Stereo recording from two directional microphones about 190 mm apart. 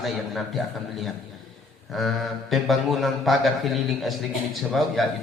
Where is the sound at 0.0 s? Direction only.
Centre (ahead or behind).